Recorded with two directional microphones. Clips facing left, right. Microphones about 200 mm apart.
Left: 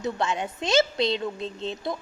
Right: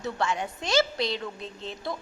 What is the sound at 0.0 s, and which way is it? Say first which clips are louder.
A woman's voice: left 2 dB; 20° left (ahead or behind).